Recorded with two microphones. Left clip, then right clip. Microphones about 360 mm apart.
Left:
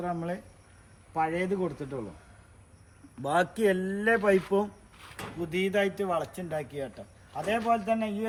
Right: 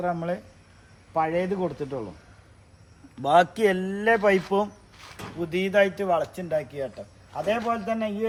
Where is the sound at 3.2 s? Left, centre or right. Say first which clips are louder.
Right 7 dB; centre.